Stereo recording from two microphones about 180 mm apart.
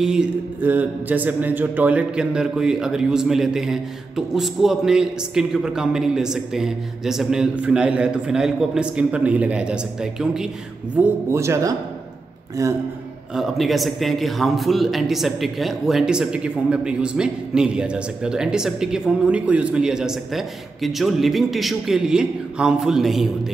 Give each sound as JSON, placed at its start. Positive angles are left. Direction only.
{"t": 0.0, "sound": "speech", "side_deg": -5}
{"t": 11.0, "sound": "speech", "side_deg": -15}
{"t": 13.3, "sound": "speech", "side_deg": 0}